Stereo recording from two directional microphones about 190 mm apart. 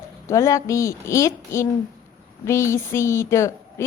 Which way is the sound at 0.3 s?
15° left (ahead or behind).